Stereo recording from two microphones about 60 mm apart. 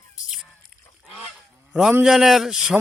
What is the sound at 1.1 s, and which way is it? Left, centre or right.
Goose, centre.